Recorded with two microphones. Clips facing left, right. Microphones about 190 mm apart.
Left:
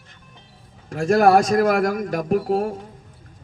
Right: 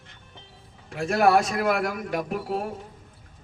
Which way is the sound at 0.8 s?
40° left (ahead or behind).